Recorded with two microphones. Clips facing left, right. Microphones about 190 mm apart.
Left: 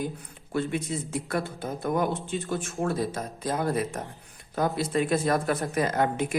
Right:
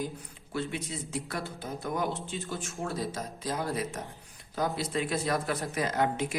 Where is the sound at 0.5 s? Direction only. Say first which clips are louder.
Left 6 dB; 50° left (ahead or behind).